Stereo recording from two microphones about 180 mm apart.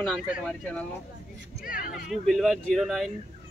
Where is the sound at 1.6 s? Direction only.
50° left (ahead or behind).